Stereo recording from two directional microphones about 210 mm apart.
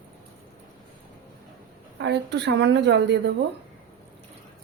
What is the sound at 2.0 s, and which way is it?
A woman's voice, 55° right (ahead or behind).